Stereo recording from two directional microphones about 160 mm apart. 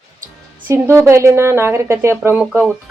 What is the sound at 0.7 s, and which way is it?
Speech, 15° right (ahead or behind).